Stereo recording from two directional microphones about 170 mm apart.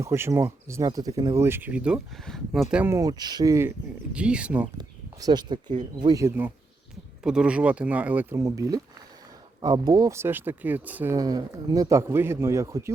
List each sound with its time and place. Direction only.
0.0 s speech: 15° right (ahead or behind)
2.9 s speech: 20° right (ahead or behind)
4.1 s speech: 5° right (ahead or behind)
4.8 s speech: 25° right (ahead or behind)